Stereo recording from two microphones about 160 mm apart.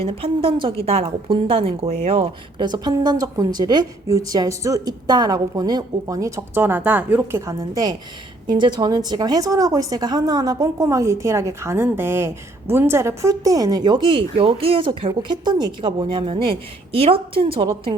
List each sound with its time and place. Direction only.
0.0 s a woman's voice: 35° right (ahead or behind)